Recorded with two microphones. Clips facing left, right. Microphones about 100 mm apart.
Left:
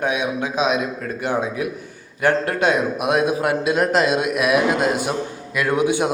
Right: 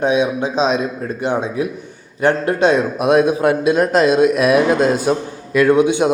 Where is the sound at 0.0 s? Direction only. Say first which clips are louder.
Right 6 dB; 25° right (ahead or behind).